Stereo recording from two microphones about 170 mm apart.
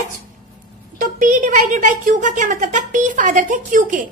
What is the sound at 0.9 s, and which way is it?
Speech, 50° right (ahead or behind).